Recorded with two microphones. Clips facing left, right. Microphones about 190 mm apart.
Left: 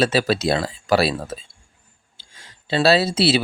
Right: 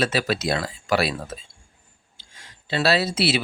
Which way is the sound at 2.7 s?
30° left (ahead or behind).